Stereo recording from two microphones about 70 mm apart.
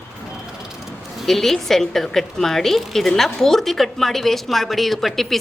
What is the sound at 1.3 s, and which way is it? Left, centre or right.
A woman's voice, centre.